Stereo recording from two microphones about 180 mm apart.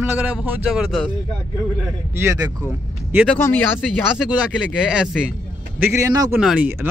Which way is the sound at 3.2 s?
10° left (ahead or behind).